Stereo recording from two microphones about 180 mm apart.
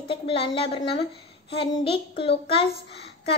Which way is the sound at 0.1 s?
30° left (ahead or behind).